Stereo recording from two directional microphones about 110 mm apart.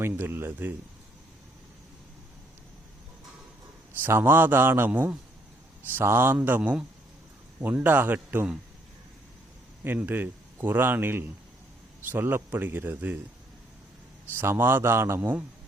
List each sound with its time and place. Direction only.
0.0 s a man's voice: 20° right (ahead or behind)
4.0 s a man's voice: 20° right (ahead or behind)
9.8 s speech: 15° right (ahead or behind)
14.3 s a man's voice: 20° right (ahead or behind)